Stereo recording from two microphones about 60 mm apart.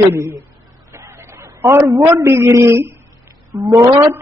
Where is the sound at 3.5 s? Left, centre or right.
Right.